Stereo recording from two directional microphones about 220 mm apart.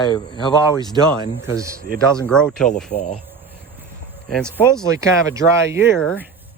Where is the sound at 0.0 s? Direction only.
20° left (ahead or behind).